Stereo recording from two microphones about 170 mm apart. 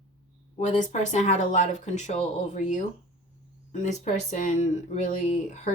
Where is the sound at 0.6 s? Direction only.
45° left (ahead or behind).